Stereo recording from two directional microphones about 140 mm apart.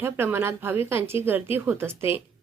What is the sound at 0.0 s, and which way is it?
Speech, 15° right (ahead or behind).